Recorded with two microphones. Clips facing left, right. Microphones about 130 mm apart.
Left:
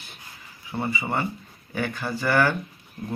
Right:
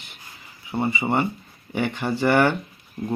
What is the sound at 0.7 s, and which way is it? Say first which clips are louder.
A man's voice: right 4 dB; 25° right (ahead or behind).